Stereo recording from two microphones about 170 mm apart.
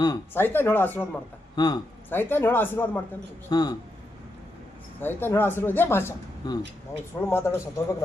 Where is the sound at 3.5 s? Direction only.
25° left (ahead or behind).